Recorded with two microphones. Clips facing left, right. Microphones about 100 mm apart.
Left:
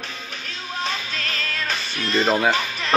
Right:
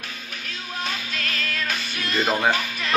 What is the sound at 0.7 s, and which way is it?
Music, 30° left (ahead or behind).